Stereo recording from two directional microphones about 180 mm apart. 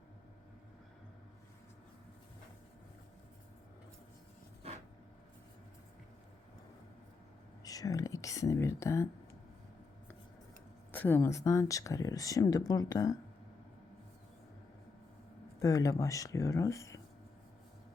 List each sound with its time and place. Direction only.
4.6 s a sound: 35° right (ahead or behind)
7.6 s speech: 20° left (ahead or behind)
10.9 s speech: 10° left (ahead or behind)
15.6 s speech: 20° left (ahead or behind)